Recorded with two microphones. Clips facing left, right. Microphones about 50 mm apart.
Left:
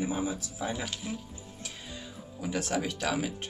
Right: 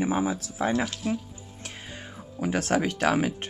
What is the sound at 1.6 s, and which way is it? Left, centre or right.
Music, right.